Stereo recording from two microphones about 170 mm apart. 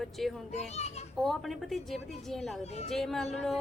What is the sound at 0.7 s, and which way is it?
Speech, 40° left (ahead or behind).